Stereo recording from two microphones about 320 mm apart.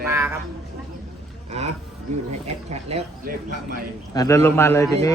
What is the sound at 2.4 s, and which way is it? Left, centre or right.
Speech, centre.